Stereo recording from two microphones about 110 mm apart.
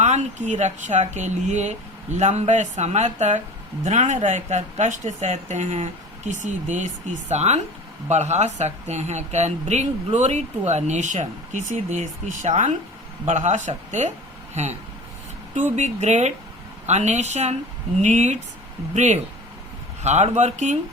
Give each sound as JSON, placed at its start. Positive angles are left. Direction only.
{"t": 0.0, "sound": "speech", "side_deg": -90}